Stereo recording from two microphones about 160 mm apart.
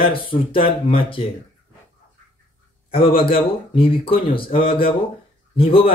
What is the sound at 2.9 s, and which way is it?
Speech, 35° left (ahead or behind).